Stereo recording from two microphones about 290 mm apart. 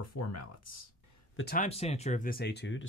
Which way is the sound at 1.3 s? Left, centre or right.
Left.